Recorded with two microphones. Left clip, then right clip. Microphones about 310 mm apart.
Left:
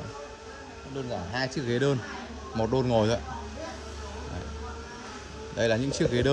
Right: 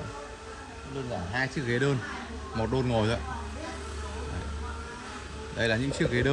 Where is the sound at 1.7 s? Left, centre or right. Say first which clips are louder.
Left 1 dB; centre.